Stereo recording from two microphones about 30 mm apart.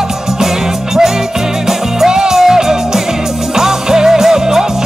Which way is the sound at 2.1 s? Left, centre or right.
Right.